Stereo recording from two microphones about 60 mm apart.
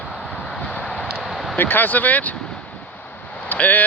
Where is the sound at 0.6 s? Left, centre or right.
Left; by 1.5 s centre.